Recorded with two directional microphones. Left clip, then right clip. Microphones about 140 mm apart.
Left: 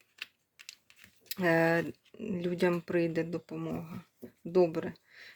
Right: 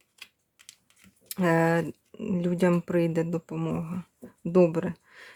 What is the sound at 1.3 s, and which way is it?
Speech, 30° right (ahead or behind).